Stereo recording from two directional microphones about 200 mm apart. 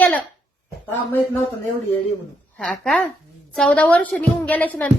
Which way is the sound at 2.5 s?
5° left (ahead or behind).